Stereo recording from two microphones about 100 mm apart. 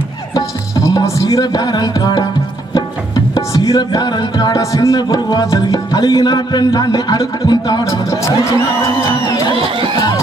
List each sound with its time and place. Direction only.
0.3 s music: 40° left (ahead or behind)
3.3 s music: 35° left (ahead or behind)